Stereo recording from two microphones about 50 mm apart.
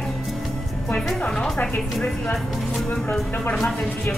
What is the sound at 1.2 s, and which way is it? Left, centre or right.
Speech, centre.